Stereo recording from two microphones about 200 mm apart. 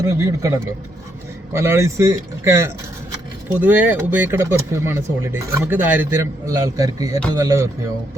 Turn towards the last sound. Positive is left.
turn(degrees=-15)  # may be behind; listen again after turning